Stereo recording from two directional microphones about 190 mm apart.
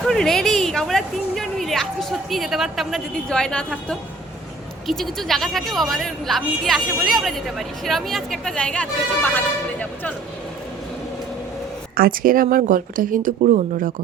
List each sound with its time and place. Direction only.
0.0 s speech: centre (ahead or behind)
11.9 s a woman's voice: 50° right (ahead or behind)